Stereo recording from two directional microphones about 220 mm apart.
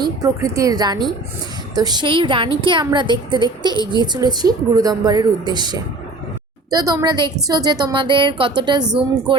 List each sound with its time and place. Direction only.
0.0 s a woman's voice: 15° right (ahead or behind)